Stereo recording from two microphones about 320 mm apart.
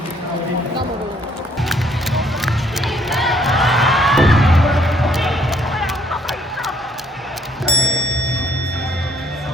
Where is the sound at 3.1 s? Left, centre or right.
Centre.